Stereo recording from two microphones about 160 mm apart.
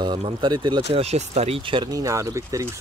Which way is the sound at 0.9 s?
40° right (ahead or behind).